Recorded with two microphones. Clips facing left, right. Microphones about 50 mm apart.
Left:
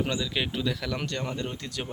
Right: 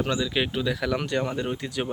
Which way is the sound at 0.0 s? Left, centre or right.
Centre.